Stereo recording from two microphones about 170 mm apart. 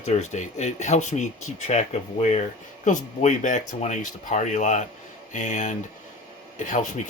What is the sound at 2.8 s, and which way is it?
Speech, 45° left (ahead or behind).